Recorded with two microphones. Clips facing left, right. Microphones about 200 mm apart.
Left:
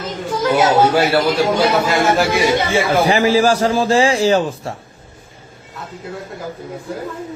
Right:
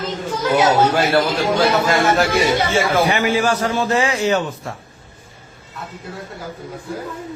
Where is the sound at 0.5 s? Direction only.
10° left (ahead or behind).